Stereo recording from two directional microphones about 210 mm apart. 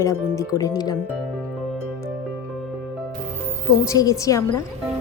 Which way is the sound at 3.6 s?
15° left (ahead or behind).